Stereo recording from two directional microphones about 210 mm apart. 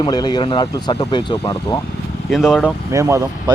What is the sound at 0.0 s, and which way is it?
Speech, 20° left (ahead or behind).